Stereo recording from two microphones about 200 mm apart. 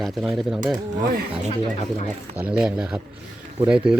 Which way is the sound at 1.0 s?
40° right (ahead or behind).